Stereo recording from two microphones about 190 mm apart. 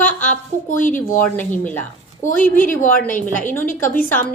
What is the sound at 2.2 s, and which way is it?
A woman's voice, 45° left (ahead or behind).